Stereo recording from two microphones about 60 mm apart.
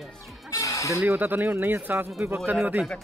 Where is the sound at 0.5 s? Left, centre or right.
Left.